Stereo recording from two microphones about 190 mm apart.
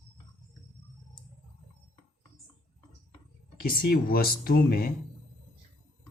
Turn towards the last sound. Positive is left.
turn(degrees=50)  # may be behind; listen again after turning